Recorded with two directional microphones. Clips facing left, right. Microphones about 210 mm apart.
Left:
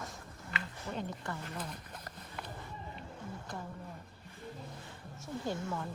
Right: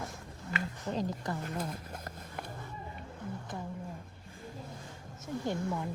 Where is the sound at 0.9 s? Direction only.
35° right (ahead or behind).